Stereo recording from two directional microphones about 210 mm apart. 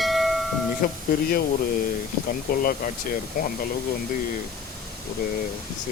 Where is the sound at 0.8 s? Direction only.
40° left (ahead or behind).